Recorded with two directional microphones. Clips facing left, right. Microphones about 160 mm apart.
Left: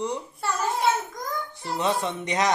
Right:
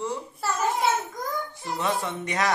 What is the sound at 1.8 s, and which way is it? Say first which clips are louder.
Speech: left 2 dB; 20° left (ahead or behind).